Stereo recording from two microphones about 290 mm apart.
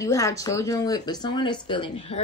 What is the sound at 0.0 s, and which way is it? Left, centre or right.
A woman's voice, centre.